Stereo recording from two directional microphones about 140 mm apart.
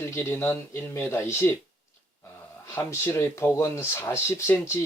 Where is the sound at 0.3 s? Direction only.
15° left (ahead or behind).